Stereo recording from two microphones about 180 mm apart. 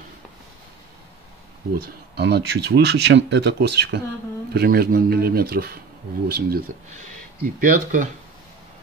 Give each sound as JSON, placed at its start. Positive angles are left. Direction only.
{"t": 2.1, "sound": "speech", "side_deg": -65}
{"t": 4.6, "sound": "speech", "side_deg": -60}
{"t": 7.6, "sound": "speech", "side_deg": -45}